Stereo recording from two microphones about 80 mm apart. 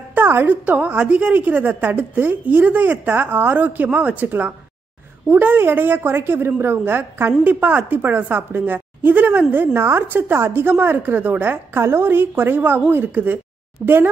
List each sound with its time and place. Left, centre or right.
0.1 s a woman's voice: right
13.8 s speech: centre